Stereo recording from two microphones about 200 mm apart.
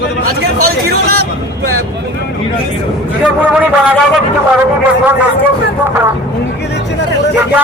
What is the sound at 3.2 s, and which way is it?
Speech, 5° right (ahead or behind).